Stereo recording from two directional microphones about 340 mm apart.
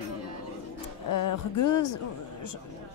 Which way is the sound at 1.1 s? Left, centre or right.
Left.